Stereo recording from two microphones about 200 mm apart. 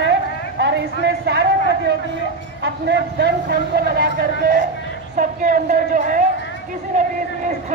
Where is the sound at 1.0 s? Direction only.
55° right (ahead or behind).